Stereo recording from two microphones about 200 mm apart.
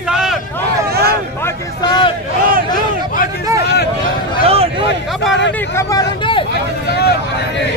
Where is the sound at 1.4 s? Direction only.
20° left (ahead or behind).